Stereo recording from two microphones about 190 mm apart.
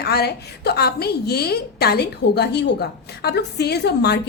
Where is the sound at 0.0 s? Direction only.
55° left (ahead or behind).